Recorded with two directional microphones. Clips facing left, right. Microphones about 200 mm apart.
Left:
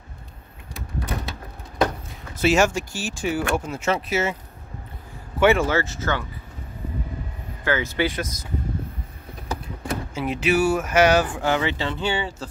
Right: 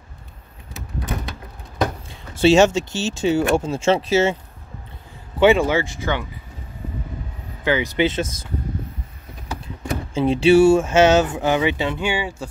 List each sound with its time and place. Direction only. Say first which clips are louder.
2.0 s speech: right 6 dB; 30° right (ahead or behind)
5.4 s speech: right 3 dB; 15° right (ahead or behind)
7.6 s speech: right 4 dB; 15° right (ahead or behind)
10.1 s speech: right 9 dB; 30° right (ahead or behind); by 12.4 s 10° right (ahead or behind)